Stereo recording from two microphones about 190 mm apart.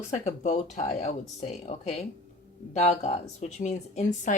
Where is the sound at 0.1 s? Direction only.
40° left (ahead or behind).